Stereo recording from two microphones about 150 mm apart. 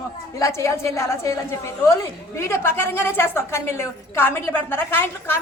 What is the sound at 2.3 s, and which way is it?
A woman's voice, 15° left (ahead or behind).